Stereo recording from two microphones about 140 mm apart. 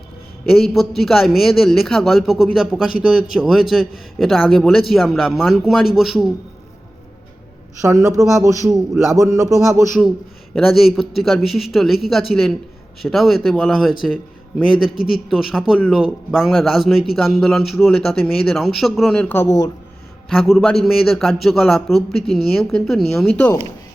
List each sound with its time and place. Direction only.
0.5 s a man's voice: centre (ahead or behind)
7.8 s speech: 20° right (ahead or behind)
10.5 s a man's voice: centre (ahead or behind)
15.1 s a man's voice: 5° right (ahead or behind); by 19.7 s 25° left (ahead or behind)
20.3 s a man's voice: centre (ahead or behind)